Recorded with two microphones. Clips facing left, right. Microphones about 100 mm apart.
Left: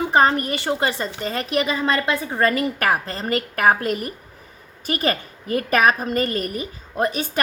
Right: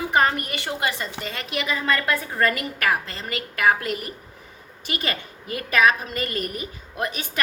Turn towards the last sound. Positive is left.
turn(degrees=35)  # may be behind; listen again after turning